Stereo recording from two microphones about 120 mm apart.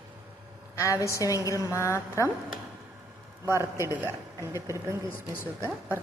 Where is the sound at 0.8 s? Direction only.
25° left (ahead or behind).